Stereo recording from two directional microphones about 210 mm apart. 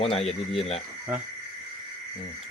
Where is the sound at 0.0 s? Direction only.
30° left (ahead or behind).